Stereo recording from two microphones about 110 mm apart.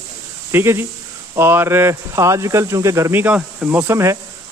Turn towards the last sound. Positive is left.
turn(degrees=-25)  # may be behind; listen again after turning